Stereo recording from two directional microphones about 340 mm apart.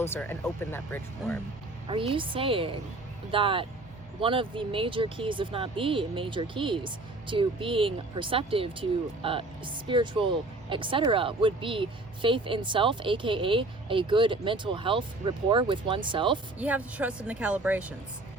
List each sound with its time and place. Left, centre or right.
0.0 s speech: centre
1.9 s speech: centre